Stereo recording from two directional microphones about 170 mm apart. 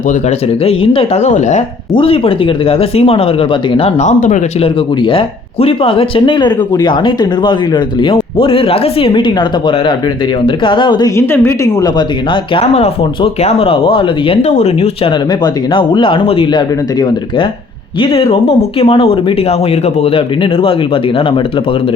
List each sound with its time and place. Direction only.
0.1 s speech: 40° left (ahead or behind)
5.0 s speech: 35° left (ahead or behind)
11.2 s speech: 15° left (ahead or behind); by 21.4 s 30° left (ahead or behind)